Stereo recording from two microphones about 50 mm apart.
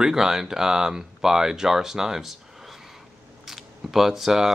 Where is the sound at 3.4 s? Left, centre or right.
Centre.